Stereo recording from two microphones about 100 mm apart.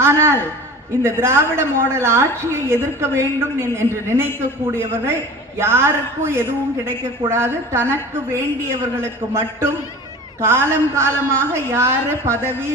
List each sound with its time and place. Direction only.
0.0 s a man's voice: 25° right (ahead or behind)